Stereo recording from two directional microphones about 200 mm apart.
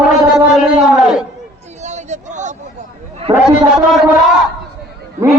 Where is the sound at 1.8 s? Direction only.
35° right (ahead or behind).